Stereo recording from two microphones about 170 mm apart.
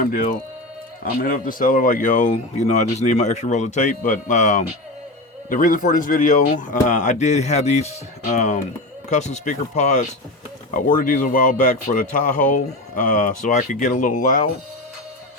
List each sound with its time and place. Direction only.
0.0 s speech: 55° left (ahead or behind)